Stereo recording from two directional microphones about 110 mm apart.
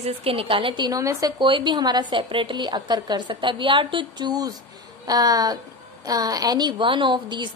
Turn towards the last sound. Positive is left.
turn(degrees=-45)  # may be behind; listen again after turning